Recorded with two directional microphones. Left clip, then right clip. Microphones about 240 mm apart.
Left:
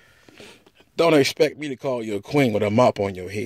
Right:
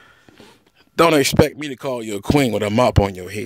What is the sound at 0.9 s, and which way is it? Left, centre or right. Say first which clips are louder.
Speech: right 3 dB; right.